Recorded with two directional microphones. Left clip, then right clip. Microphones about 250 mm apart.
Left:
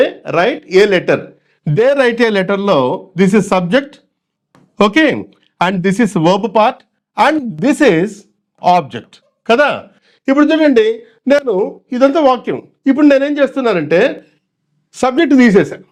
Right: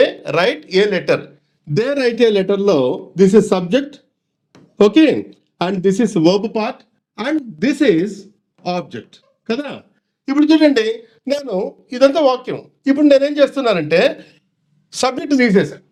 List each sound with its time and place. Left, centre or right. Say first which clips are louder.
0.0 s a sound: left 1 dB; left
0.3 s speech: left 3 dB; left
0.7 s speech: left 5 dB; left
10.3 s speech: left 2 dB; left
12.2 s speech: left 3 dB; left
12.5 s speech: left 3 dB; left
15.4 s speech: left 4 dB; left